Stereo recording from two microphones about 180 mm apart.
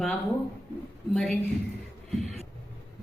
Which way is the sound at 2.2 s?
35° right (ahead or behind).